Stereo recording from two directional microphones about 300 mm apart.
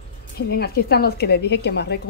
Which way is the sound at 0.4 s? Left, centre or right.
Left.